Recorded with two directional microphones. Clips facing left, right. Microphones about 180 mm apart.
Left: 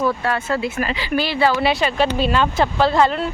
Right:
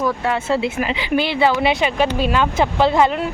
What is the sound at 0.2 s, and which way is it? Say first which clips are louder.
A woman's voice: right 2 dB; 20° right (ahead or behind).